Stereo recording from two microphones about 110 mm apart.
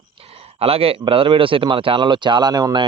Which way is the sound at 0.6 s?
65° right (ahead or behind).